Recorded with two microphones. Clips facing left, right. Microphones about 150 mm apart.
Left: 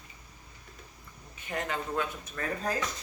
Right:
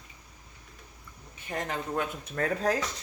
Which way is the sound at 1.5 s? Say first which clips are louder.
Right 1 dB; 40° right (ahead or behind).